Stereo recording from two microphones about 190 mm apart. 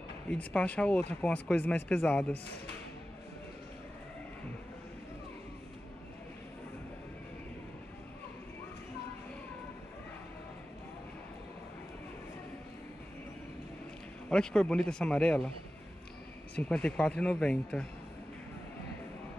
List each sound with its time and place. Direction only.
0.3 s speech: 5° left (ahead or behind)
14.3 s speech: 5° left (ahead or behind)
16.5 s speech: 5° left (ahead or behind)